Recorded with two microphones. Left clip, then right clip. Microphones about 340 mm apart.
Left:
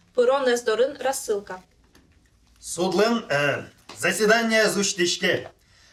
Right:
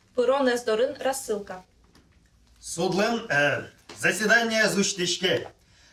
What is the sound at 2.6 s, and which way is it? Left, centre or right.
Speech, left.